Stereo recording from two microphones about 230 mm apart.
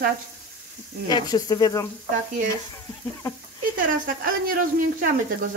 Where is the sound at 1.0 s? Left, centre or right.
Centre.